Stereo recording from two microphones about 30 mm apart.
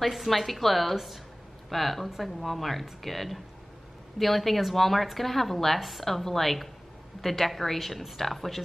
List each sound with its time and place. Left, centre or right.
0.0 s a woman's voice: centre